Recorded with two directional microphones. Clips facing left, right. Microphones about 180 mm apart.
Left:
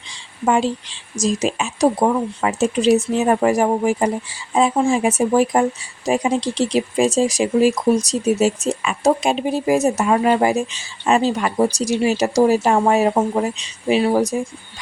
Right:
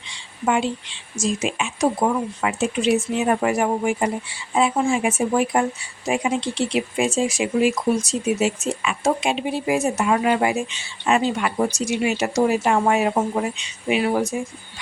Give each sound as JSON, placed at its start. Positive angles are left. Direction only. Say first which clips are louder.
{"t": 0.1, "sound": "speech", "louder": "left 3 dB", "side_deg": 35}